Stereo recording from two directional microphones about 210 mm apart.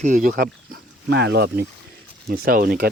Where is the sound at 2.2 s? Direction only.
45° right (ahead or behind).